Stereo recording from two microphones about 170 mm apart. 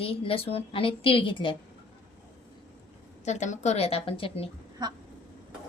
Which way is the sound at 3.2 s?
45° left (ahead or behind).